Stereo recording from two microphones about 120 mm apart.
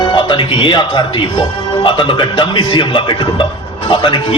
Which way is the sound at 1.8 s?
45° left (ahead or behind).